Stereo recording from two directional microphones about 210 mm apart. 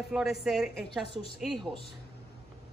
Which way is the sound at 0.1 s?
Centre (ahead or behind).